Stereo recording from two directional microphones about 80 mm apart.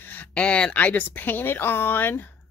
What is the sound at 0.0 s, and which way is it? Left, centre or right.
Speech, left.